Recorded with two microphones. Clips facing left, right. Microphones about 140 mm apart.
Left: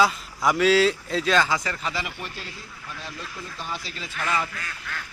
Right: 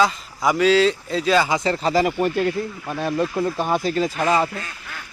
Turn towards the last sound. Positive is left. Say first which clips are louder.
# right 8 dB
turn(degrees=-30)  # may be behind; listen again after turning